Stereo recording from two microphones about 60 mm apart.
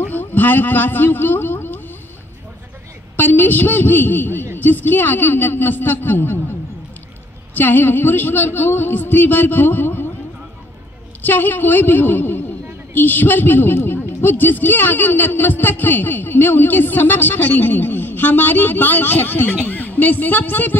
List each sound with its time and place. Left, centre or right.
0.1 s a man's voice: left
3.2 s a man's voice: left
7.5 s a man's voice: left
11.2 s a man's voice: left